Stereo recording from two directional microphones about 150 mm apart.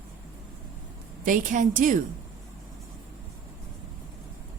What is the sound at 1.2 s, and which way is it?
Speech, 60° right (ahead or behind).